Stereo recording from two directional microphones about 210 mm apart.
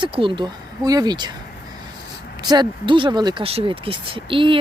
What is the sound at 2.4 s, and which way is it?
Speech, 20° right (ahead or behind).